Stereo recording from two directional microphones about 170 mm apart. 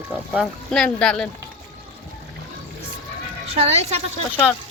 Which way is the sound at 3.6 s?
40° right (ahead or behind).